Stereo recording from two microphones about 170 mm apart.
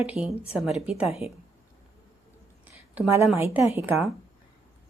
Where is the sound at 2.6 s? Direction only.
15° right (ahead or behind).